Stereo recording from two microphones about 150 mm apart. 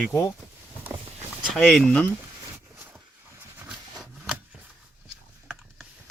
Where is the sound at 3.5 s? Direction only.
10° right (ahead or behind).